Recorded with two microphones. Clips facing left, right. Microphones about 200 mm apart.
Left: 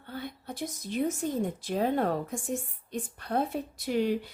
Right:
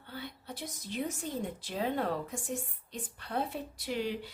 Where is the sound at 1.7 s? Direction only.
50° left (ahead or behind).